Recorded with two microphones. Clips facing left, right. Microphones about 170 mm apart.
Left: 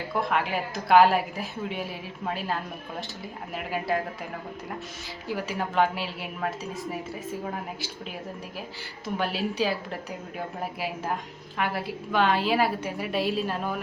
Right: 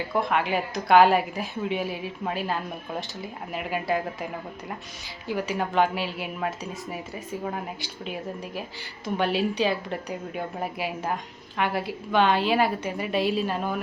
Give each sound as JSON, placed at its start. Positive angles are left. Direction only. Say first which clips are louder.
{"t": 0.2, "sound": "a woman's voice", "louder": "right 2 dB", "side_deg": 0}
{"t": 5.3, "sound": "a woman's voice", "louder": "right 3 dB", "side_deg": 0}
{"t": 9.1, "sound": "a woman's voice", "louder": "right 3 dB", "side_deg": 0}